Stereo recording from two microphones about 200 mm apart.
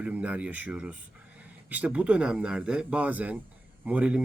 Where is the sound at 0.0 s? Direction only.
5° right (ahead or behind).